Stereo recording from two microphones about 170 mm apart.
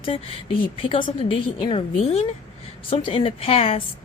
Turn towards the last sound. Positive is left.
turn(degrees=35)  # may be behind; listen again after turning